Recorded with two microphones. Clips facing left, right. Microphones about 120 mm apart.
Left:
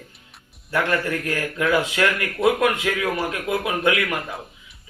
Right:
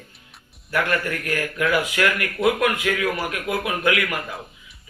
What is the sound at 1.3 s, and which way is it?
Speech, 25° left (ahead or behind).